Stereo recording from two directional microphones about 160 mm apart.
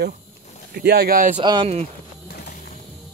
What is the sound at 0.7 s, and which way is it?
Speech, 75° right (ahead or behind).